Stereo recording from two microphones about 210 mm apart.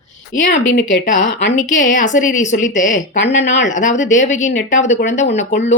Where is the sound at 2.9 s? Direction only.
60° left (ahead or behind).